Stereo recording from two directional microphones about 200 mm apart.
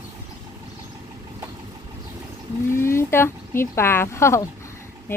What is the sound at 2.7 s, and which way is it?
Speech, 10° left (ahead or behind).